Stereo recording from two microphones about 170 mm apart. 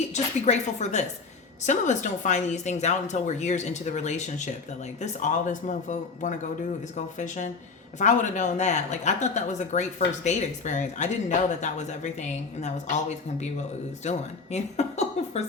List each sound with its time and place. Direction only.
0.1 s a woman's voice: 40° left (ahead or behind)
14.0 s a woman's voice: 40° left (ahead or behind)